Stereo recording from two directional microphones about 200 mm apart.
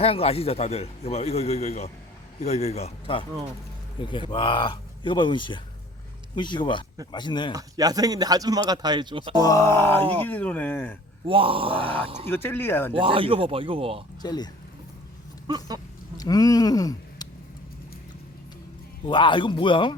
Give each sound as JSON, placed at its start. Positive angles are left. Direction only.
{"t": 0.0, "sound": "a man's voice", "side_deg": 30}
{"t": 7.5, "sound": "speech", "side_deg": -20}
{"t": 9.4, "sound": "speech", "side_deg": 15}
{"t": 11.3, "sound": "speech", "side_deg": -25}
{"t": 12.3, "sound": "speech", "side_deg": 10}
{"t": 12.9, "sound": "speech", "side_deg": -25}
{"t": 14.2, "sound": "speech", "side_deg": 20}
{"t": 15.4, "sound": "speech", "side_deg": -20}
{"t": 16.1, "sound": "speech", "side_deg": 20}
{"t": 19.0, "sound": "speech", "side_deg": 25}